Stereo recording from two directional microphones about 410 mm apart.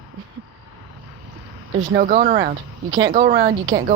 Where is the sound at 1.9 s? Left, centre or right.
Centre.